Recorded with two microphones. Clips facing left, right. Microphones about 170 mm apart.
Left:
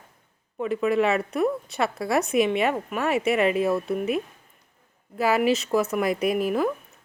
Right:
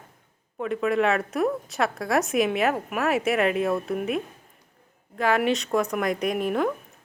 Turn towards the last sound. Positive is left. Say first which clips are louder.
# left 1 dB
turn(degrees=5)  # may be behind; listen again after turning